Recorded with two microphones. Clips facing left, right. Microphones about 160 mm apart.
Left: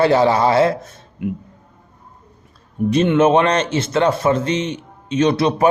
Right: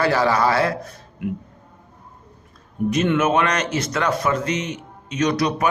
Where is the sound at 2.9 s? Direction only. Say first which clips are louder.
Left 5 dB; 30° left (ahead or behind).